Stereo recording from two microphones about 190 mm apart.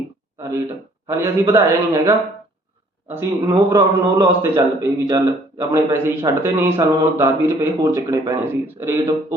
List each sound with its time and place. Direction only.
1.0 s a man's voice: 15° right (ahead or behind)